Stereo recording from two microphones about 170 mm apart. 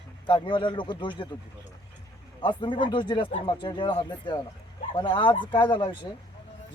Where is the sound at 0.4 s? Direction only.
30° left (ahead or behind).